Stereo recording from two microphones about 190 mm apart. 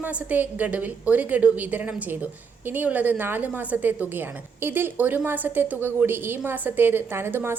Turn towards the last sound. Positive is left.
turn(degrees=-10)  # may be behind; listen again after turning